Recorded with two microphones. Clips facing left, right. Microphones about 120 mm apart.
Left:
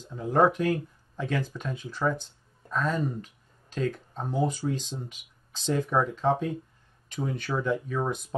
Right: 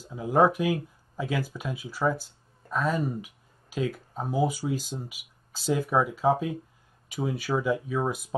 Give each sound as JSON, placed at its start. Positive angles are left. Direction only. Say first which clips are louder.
{"t": 0.0, "sound": "speech", "louder": "right 1 dB", "side_deg": -5}